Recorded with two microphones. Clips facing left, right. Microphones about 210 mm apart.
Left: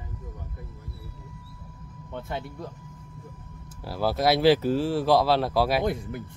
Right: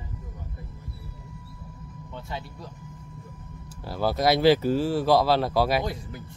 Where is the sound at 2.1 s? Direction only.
55° left (ahead or behind).